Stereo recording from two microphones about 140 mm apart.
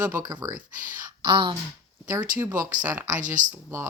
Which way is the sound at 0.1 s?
25° right (ahead or behind).